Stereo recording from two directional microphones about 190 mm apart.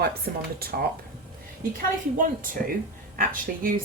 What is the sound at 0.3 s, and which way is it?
Speech, 50° right (ahead or behind).